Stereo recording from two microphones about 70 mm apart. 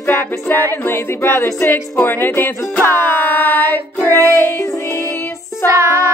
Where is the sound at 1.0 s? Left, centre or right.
Left.